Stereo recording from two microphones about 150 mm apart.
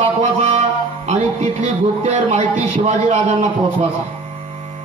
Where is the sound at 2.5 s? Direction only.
55° right (ahead or behind).